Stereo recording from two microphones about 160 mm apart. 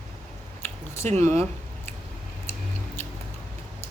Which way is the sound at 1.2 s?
15° left (ahead or behind).